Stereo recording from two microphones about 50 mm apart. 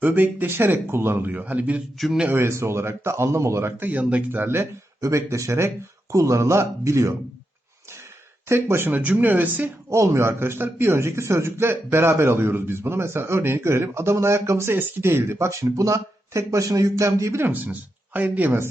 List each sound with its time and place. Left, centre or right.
0.0 s speech: right
1.3 s speech: right
2.0 s speech: centre
2.3 s a man's voice: right
3.8 s speech: right
4.9 s speech: right
8.4 s a man's voice: right
8.9 s speech: right
9.9 s a man's voice: right
14.7 s speech: right
17.5 s speech: right